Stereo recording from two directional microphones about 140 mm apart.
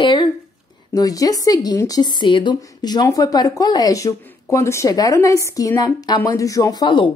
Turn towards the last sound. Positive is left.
turn(degrees=30)  # may be behind; listen again after turning